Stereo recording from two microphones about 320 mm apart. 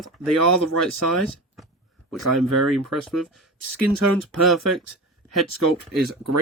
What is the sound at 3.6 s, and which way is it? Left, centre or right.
Speech, right.